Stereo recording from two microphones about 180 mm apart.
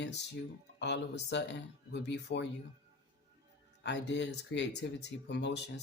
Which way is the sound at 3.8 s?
75° left (ahead or behind).